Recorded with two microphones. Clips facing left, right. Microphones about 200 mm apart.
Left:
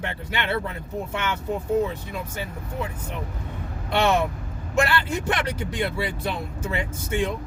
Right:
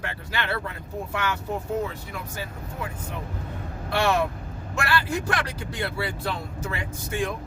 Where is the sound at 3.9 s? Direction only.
20° left (ahead or behind).